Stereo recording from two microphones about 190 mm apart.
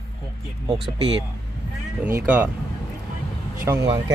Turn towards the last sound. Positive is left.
turn(degrees=-20)  # may be behind; listen again after turning